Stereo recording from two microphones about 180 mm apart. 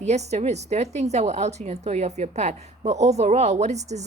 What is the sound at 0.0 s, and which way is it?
A woman's voice, 40° right (ahead or behind).